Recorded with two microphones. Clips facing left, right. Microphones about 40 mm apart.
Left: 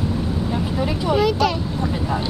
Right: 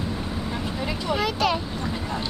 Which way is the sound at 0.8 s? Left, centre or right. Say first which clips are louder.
Left 7 dB; centre.